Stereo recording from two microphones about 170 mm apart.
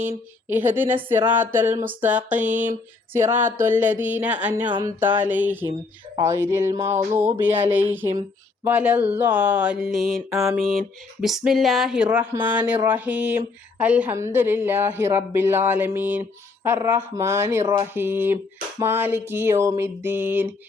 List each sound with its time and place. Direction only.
0.0 s speech: 10° right (ahead or behind)
10.2 s speech: 15° right (ahead or behind)
10.7 s speech: centre (ahead or behind)